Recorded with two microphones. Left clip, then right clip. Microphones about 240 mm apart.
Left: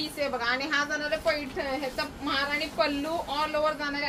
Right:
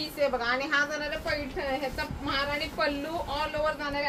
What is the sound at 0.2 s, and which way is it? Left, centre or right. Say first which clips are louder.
Speech: right 2 dB; centre.